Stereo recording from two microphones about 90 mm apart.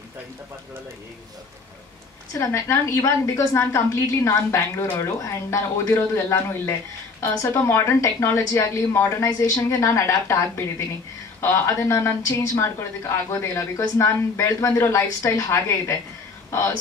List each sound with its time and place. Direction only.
2.3 s a woman's voice: 35° left (ahead or behind)
11.4 s a woman's voice: 30° left (ahead or behind)